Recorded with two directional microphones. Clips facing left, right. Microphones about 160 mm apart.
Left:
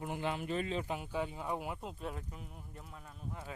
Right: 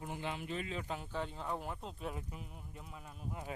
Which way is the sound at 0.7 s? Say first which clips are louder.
Left 4 dB; 20° left (ahead or behind).